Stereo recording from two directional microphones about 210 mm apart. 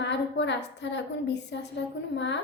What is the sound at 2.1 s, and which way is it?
Child singing, 55° left (ahead or behind).